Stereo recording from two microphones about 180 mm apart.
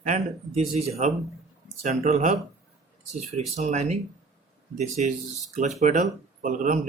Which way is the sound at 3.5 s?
40° right (ahead or behind).